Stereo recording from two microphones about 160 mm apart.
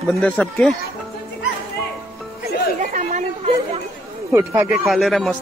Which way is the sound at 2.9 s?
50° right (ahead or behind).